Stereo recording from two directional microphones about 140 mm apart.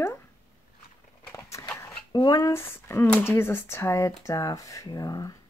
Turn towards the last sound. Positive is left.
turn(degrees=25)  # may be behind; listen again after turning